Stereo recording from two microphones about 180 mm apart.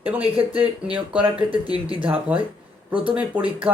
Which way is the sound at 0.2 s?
30° right (ahead or behind).